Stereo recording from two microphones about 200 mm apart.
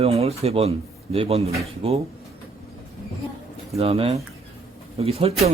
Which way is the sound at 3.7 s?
30° right (ahead or behind).